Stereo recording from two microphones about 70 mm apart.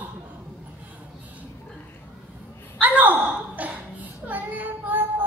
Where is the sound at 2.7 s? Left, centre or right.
Right.